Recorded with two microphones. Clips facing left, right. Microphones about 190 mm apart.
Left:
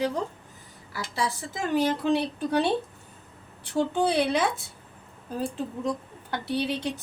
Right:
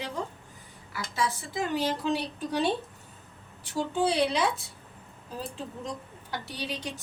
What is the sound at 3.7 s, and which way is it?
Speech, 55° left (ahead or behind).